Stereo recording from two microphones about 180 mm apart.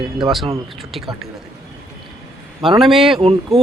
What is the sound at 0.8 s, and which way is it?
Speech, centre (ahead or behind).